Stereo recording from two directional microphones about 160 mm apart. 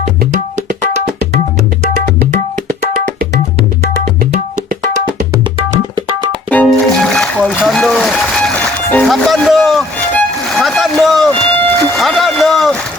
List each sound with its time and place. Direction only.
0.2 s tabla: 70° right (ahead or behind)
6.7 s music: centre (ahead or behind)